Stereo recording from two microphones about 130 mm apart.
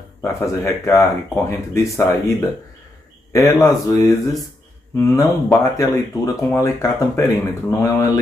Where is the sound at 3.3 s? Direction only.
25° left (ahead or behind).